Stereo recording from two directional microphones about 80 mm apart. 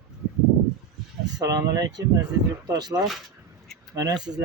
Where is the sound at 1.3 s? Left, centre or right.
Right.